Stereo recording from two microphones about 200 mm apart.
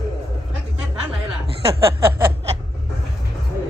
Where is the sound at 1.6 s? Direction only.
15° right (ahead or behind).